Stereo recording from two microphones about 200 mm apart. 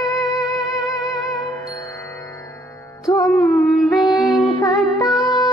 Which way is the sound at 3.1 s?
15° left (ahead or behind).